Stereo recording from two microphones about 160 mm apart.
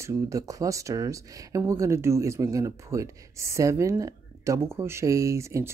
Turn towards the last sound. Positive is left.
turn(degrees=-20)  # may be behind; listen again after turning